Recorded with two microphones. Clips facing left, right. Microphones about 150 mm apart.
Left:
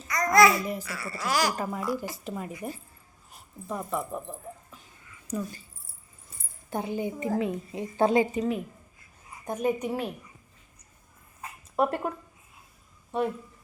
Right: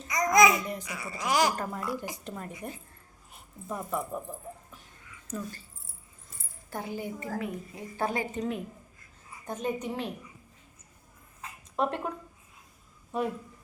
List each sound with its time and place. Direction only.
0.1 s babbling: 20° right (ahead or behind)
0.6 s speech: 5° left (ahead or behind)
0.9 s speech: 20° right (ahead or behind)
1.5 s speech: 5° left (ahead or behind)
5.3 s a woman's voice: 15° left (ahead or behind)
6.7 s a woman's voice: 20° left (ahead or behind)
8.4 s a woman's voice: 5° left (ahead or behind)
11.8 s speech: 5° left (ahead or behind)
13.1 s a sound: centre (ahead or behind)